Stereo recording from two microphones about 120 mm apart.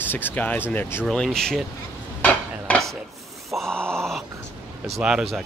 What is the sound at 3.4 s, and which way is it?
Groan, centre (ahead or behind).